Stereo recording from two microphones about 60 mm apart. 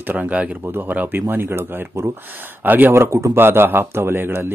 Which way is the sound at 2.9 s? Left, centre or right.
Right.